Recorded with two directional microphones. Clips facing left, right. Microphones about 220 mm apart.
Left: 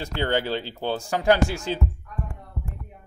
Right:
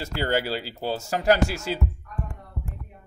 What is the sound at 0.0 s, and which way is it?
Speech, 5° right (ahead or behind).